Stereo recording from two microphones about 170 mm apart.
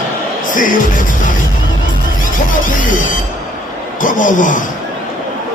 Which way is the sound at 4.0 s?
50° left (ahead or behind).